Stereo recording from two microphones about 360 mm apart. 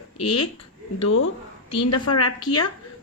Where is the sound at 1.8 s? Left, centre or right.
Left.